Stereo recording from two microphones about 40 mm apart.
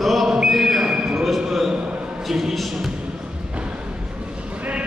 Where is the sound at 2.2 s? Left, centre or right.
Centre.